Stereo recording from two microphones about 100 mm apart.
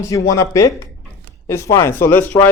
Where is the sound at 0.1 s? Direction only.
30° left (ahead or behind).